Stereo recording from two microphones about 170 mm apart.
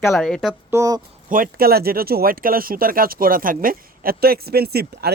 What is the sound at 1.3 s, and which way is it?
Speech, 60° right (ahead or behind).